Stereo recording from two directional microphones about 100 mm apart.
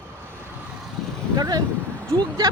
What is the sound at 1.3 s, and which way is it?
Speech, 40° right (ahead or behind).